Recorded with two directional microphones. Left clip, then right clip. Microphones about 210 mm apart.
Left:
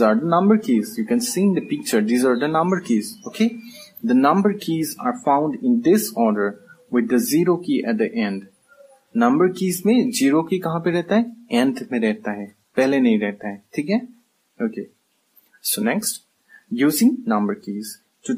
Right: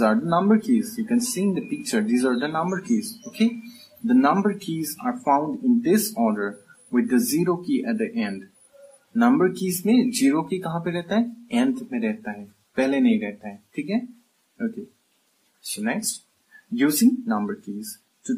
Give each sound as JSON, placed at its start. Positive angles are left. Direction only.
{"t": 0.0, "sound": "speech", "side_deg": 40}
{"t": 4.1, "sound": "speech", "side_deg": 40}
{"t": 16.7, "sound": "speech", "side_deg": 45}